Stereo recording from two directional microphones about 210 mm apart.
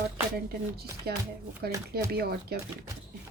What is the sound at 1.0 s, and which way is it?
Speech, 50° right (ahead or behind).